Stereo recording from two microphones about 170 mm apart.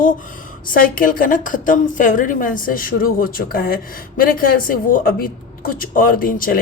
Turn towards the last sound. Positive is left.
turn(degrees=55)  # may be behind; listen again after turning